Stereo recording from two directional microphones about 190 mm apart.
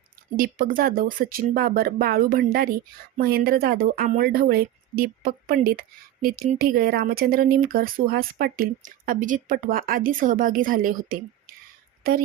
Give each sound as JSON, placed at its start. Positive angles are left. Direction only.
{"t": 0.3, "sound": "speech", "side_deg": -50}